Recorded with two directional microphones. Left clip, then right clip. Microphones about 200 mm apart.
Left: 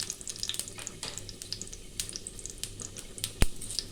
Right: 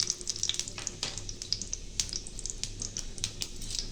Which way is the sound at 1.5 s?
5° left (ahead or behind).